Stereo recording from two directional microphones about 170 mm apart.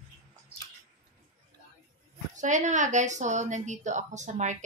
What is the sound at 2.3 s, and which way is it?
Speech, 45° right (ahead or behind).